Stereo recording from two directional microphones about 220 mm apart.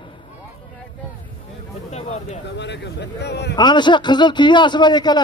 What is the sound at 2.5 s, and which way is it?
Speech, 50° left (ahead or behind).